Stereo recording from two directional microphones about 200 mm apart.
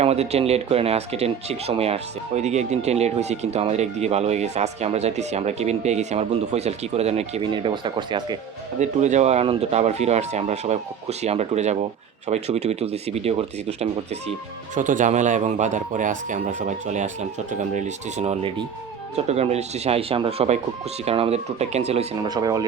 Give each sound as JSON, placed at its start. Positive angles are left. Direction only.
{"t": 0.0, "sound": "speech", "side_deg": -30}
{"t": 8.8, "sound": "speech", "side_deg": -35}